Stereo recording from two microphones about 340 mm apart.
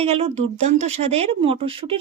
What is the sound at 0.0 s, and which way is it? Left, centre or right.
Speech, centre.